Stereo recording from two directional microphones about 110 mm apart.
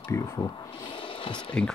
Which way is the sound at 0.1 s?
30° left (ahead or behind).